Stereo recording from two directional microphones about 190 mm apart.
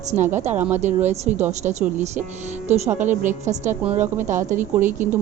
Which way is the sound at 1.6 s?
35° right (ahead or behind).